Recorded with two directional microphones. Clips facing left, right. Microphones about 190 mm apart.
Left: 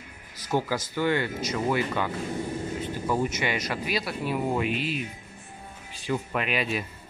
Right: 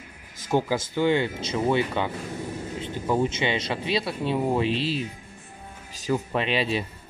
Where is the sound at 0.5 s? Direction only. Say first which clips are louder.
Right 3 dB; 25° right (ahead or behind).